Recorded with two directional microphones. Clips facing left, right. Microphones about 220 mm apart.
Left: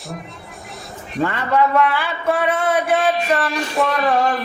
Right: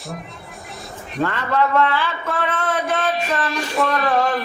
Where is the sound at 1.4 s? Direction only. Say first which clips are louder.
Left 2 dB; 10° left (ahead or behind).